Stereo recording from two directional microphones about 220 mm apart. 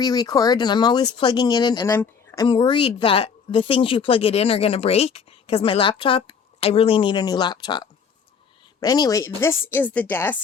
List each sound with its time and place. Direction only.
0.0 s a woman's voice: 15° left (ahead or behind)